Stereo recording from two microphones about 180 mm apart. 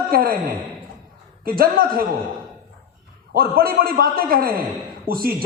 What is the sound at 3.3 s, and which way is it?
A man's voice, 55° right (ahead or behind).